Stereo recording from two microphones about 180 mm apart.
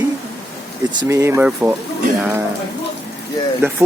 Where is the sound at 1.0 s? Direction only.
15° right (ahead or behind).